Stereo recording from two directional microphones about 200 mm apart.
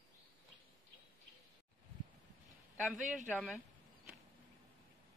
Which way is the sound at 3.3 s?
5° left (ahead or behind).